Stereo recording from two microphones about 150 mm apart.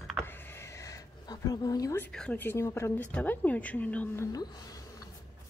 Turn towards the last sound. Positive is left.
turn(degrees=25)  # may be behind; listen again after turning